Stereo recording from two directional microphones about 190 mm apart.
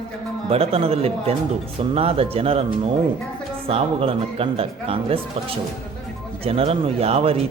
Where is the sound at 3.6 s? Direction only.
30° right (ahead or behind).